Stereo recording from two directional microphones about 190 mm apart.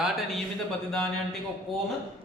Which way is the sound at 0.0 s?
Centre (ahead or behind).